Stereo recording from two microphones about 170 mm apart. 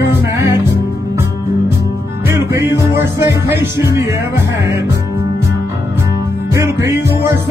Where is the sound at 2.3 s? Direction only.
15° right (ahead or behind).